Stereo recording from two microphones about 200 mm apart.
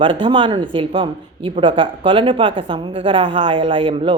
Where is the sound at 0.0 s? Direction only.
25° right (ahead or behind).